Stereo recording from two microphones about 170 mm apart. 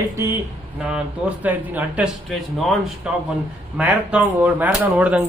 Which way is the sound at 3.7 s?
10° right (ahead or behind).